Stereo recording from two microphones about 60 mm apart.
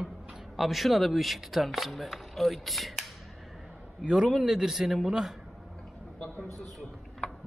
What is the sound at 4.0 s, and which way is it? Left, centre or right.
Speech, centre.